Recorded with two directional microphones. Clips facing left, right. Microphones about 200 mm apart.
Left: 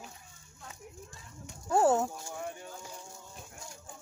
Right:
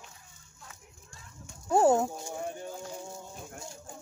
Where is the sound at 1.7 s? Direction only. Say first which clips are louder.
Right 3 dB; 15° right (ahead or behind).